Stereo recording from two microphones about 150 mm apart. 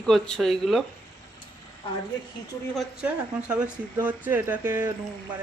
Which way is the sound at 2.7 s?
5° right (ahead or behind).